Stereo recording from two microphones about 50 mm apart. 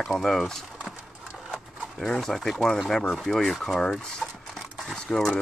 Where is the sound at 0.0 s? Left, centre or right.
Centre.